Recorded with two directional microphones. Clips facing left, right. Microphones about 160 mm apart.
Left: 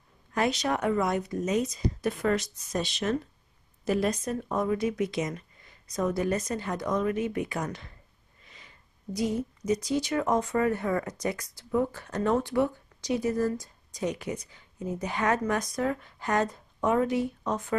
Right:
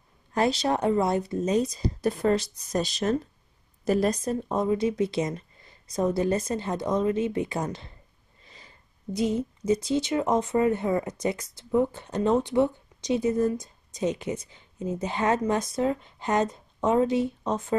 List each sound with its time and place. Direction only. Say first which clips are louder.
0.3 s a woman's voice: right 3 dB; 30° right (ahead or behind)